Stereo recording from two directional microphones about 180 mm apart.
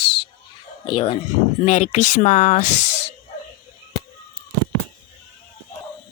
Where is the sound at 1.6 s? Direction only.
40° left (ahead or behind).